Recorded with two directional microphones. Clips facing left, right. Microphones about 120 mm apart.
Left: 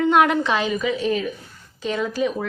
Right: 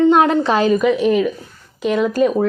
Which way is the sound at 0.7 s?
70° right (ahead or behind).